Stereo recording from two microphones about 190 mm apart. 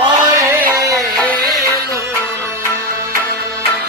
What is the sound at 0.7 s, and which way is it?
Music, 15° right (ahead or behind).